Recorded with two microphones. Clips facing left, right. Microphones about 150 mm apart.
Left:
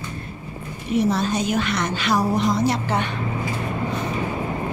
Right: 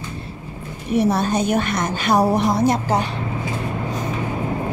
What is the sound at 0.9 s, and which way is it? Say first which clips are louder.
A woman's voice: right 2 dB; 60° right (ahead or behind).